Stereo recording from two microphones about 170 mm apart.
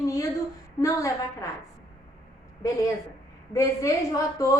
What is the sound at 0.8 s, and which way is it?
Speech, 20° left (ahead or behind).